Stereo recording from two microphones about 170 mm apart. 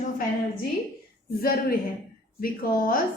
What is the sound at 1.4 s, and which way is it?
Speech, 60° left (ahead or behind).